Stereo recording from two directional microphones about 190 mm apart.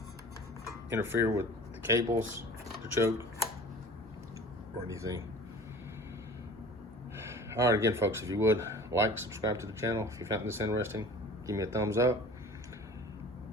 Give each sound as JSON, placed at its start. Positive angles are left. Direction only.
{"t": 0.6, "sound": "speech", "side_deg": -10}
{"t": 4.9, "sound": "speech", "side_deg": -15}
{"t": 7.5, "sound": "speech", "side_deg": -15}